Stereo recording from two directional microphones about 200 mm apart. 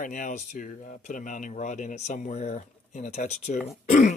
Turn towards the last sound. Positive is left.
turn(degrees=40)  # may be behind; listen again after turning